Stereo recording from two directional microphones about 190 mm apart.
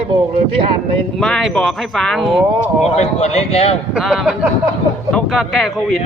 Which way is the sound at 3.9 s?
Centre (ahead or behind).